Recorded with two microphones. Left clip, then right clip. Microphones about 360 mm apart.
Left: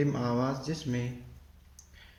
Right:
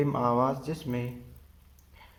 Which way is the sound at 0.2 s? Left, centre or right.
Centre.